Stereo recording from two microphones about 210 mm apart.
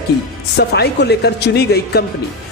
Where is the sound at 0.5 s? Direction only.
50° left (ahead or behind).